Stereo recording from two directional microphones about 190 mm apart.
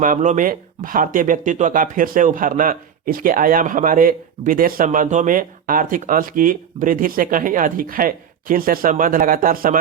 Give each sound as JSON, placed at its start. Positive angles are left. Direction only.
{"t": 0.0, "sound": "speech", "side_deg": -40}